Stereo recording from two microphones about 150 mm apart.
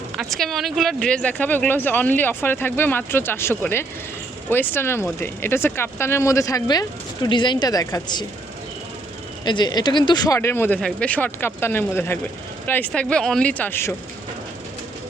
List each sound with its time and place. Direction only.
0.2 s speech: centre (ahead or behind); by 8.3 s 30° left (ahead or behind)
9.4 s speech: 30° left (ahead or behind)